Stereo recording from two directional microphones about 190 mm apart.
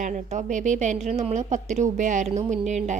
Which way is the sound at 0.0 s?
40° right (ahead or behind).